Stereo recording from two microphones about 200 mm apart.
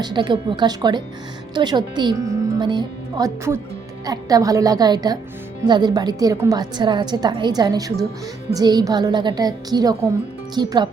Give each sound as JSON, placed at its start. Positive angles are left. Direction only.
{"t": 0.0, "sound": "a woman's voice", "side_deg": -20}